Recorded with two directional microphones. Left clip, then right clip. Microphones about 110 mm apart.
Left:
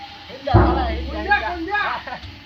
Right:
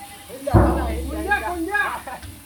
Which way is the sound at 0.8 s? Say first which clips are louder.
Left 2 dB; 35° right (ahead or behind).